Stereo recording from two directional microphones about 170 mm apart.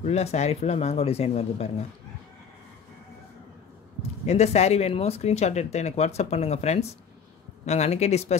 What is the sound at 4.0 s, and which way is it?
Speech, 40° left (ahead or behind).